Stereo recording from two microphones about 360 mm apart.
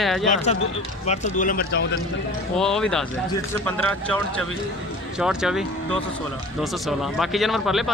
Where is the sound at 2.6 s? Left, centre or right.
Centre.